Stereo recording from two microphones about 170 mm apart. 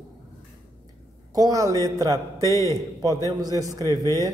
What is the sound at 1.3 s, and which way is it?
A man's voice, 20° right (ahead or behind).